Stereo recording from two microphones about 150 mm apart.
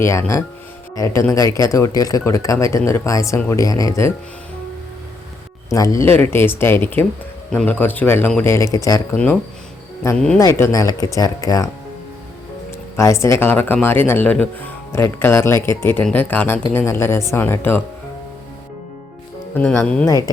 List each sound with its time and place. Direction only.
0.0 s speech: 20° left (ahead or behind)
5.7 s speech: 20° left (ahead or behind)
9.1 s speech: 10° left (ahead or behind)
13.0 s speech: 20° left (ahead or behind)
19.5 s speech: 10° left (ahead or behind)
20.1 s speech: 25° left (ahead or behind)